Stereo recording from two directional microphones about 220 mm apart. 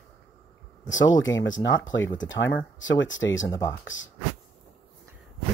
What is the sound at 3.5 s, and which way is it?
Speech, 15° left (ahead or behind).